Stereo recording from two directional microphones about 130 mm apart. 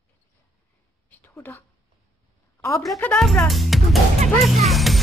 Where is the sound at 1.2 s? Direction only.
15° left (ahead or behind).